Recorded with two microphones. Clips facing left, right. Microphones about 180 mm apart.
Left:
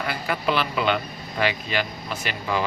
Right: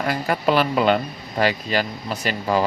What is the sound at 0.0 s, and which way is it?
Speech, 40° right (ahead or behind).